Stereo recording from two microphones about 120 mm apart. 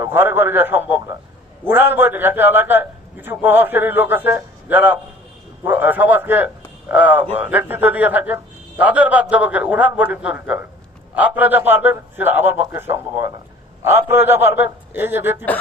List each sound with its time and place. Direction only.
0.0 s a man's voice: 20° right (ahead or behind)